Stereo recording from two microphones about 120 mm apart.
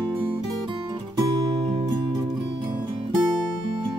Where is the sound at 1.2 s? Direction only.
35° right (ahead or behind).